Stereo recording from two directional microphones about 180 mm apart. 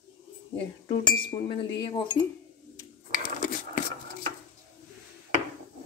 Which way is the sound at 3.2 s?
50° left (ahead or behind).